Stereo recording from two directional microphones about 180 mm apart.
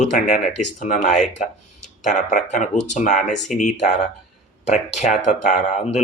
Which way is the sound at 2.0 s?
45° left (ahead or behind).